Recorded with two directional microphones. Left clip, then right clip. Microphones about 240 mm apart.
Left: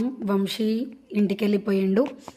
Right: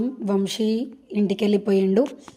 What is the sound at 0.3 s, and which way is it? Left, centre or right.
A woman's voice, centre.